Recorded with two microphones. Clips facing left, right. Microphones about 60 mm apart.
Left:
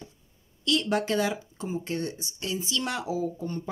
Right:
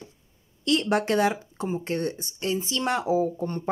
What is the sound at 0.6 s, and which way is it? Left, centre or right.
Speech, right.